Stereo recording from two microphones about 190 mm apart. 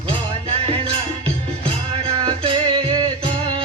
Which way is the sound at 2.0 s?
30° right (ahead or behind).